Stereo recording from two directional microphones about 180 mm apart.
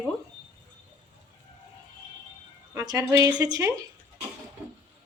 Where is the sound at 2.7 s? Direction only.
20° right (ahead or behind).